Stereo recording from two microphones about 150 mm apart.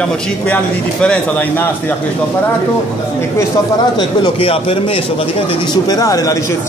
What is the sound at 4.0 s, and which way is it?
Speech, 35° left (ahead or behind).